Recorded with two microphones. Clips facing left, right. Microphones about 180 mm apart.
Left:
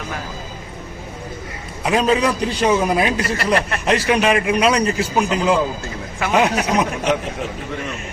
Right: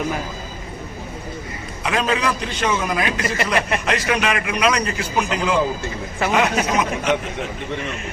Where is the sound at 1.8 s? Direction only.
35° left (ahead or behind).